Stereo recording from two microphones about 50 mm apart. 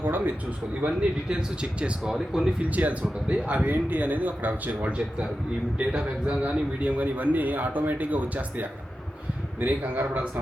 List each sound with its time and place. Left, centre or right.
0.0 s speech: right
0.8 s speech: right
2.6 s a man's voice: right